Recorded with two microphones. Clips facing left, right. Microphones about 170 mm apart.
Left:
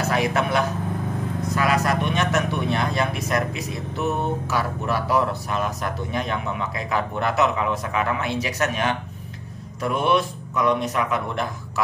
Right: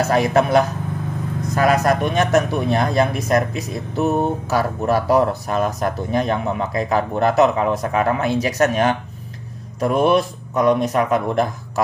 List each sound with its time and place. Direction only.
0.1 s speech: 40° right (ahead or behind)